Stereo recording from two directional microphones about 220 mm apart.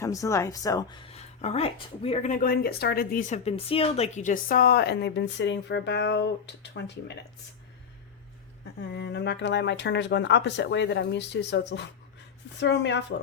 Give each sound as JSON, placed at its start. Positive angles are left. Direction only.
{"t": 0.0, "sound": "speech", "side_deg": 15}
{"t": 8.8, "sound": "speech", "side_deg": 50}